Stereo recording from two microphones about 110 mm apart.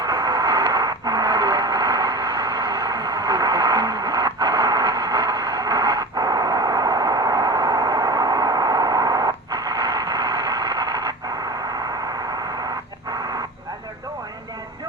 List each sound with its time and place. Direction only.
0.0 s radio: 40° right (ahead or behind)